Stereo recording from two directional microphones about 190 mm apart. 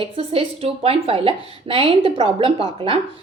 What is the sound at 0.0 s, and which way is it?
Speech, 30° right (ahead or behind).